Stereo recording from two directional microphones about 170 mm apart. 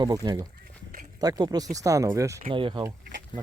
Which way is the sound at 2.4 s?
30° right (ahead or behind).